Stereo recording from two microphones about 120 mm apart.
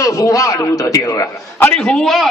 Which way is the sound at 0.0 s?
30° left (ahead or behind).